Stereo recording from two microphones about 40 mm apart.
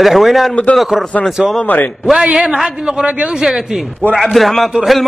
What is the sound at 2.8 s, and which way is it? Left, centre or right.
Speech, right.